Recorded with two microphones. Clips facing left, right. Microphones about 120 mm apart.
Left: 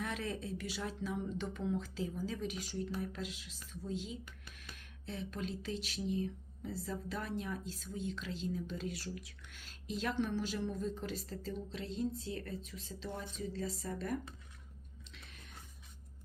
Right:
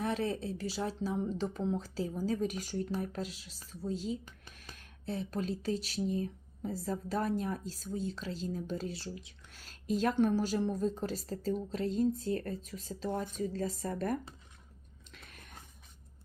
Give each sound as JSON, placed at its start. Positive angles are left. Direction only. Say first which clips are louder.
{"t": 0.0, "sound": "a woman's voice", "louder": "right 6 dB", "side_deg": -35}
{"t": 9.6, "sound": "a woman's voice", "louder": "right 8 dB", "side_deg": -40}
{"t": 15.1, "sound": "a sound", "louder": "right 4 dB", "side_deg": -50}